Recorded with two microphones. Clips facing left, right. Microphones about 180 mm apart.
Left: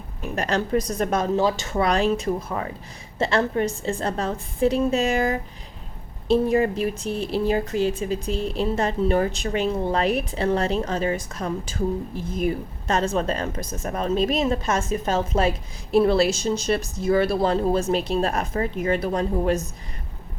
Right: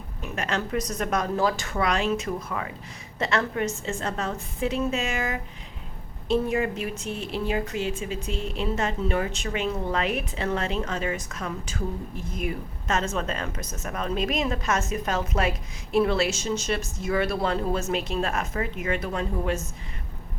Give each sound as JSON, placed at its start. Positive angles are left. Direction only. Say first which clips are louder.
{"t": 0.3, "sound": "a woman's voice", "louder": "left 5 dB", "side_deg": 35}